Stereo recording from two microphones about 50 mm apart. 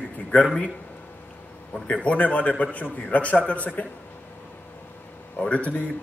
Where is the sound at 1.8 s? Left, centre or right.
Left.